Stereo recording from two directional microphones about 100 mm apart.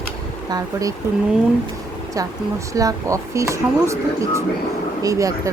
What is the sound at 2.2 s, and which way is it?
Speech, 35° right (ahead or behind).